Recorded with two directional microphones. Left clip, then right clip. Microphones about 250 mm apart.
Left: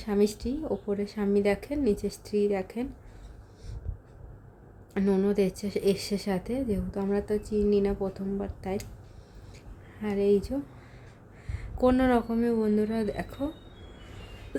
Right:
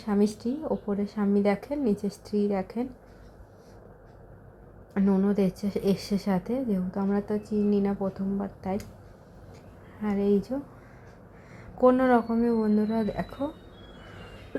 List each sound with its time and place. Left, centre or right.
0.0 s a woman's voice: centre
4.9 s a woman's voice: centre
10.0 s a woman's voice: centre
11.8 s a woman's voice: centre